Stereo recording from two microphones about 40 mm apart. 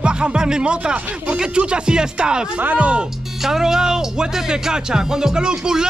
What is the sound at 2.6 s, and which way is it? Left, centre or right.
Speech, right.